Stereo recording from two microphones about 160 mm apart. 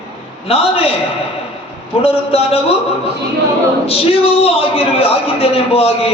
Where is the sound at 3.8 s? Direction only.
40° left (ahead or behind).